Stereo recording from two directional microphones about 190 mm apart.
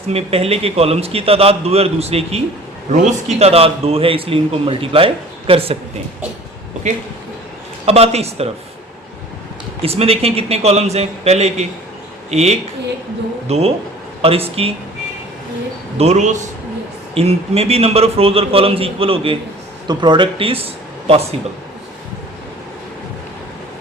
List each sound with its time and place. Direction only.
0.1 s a man's voice: 30° right (ahead or behind)
7.9 s a man's voice: 35° right (ahead or behind)
9.8 s a man's voice: 30° right (ahead or behind)
16.0 s a man's voice: 35° right (ahead or behind)